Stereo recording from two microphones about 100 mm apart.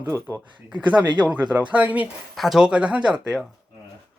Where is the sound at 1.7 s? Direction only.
15° right (ahead or behind).